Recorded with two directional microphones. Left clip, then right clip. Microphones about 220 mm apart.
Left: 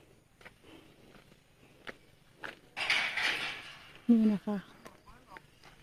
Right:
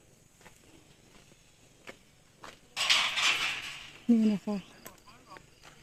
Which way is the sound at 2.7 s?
40° right (ahead or behind).